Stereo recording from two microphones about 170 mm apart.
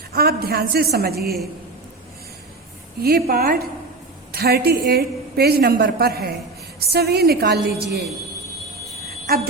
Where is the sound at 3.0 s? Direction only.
65° right (ahead or behind).